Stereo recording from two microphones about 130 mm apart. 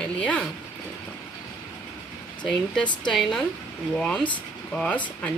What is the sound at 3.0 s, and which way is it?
Speech, 5° left (ahead or behind).